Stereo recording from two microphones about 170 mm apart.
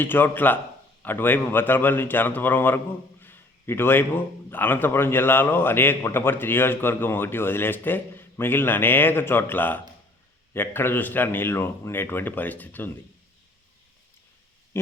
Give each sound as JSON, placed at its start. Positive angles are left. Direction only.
{"t": 0.0, "sound": "a man's voice", "side_deg": 10}